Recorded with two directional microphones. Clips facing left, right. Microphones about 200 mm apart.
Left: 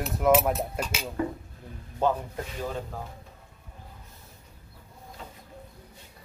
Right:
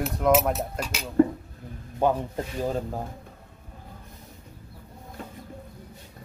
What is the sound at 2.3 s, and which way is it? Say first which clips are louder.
Speech: right 5 dB; 40° right (ahead or behind).